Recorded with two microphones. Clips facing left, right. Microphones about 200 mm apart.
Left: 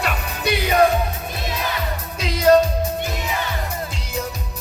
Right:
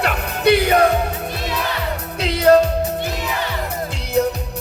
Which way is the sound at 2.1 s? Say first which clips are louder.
Right 3 dB; 65° right (ahead or behind).